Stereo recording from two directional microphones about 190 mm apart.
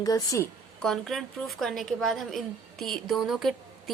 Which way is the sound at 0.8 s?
Centre (ahead or behind).